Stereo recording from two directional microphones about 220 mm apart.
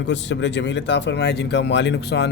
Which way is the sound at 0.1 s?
55° left (ahead or behind).